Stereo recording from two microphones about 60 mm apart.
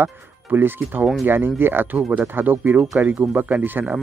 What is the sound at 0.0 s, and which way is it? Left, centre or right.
Speech, right.